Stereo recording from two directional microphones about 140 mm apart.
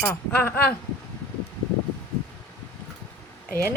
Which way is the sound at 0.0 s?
15° left (ahead or behind).